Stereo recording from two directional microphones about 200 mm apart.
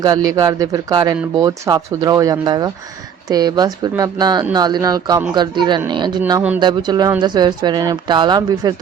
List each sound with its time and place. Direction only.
0.3 s speech: 15° right (ahead or behind)